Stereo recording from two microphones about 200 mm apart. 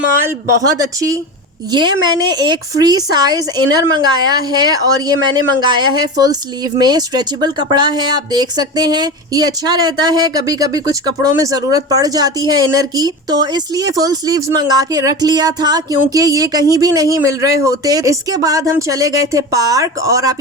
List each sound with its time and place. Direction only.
1.7 s speech: 20° right (ahead or behind)